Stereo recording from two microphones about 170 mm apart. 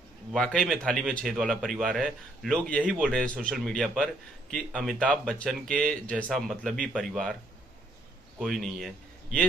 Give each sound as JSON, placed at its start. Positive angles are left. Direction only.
{"t": 0.3, "sound": "a man's voice", "side_deg": 5}
{"t": 8.4, "sound": "speech", "side_deg": 0}